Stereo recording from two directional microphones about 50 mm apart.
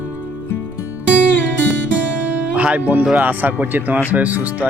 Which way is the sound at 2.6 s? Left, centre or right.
Right.